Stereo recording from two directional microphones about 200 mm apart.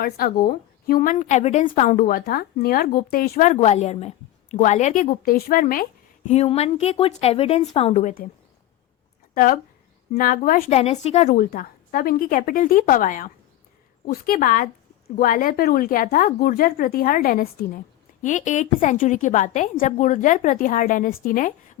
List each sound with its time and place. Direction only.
0.0 s speech: 50° left (ahead or behind)
3.5 s a woman's voice: 35° left (ahead or behind)
9.3 s speech: 45° left (ahead or behind)
10.8 s a woman's voice: 30° left (ahead or behind)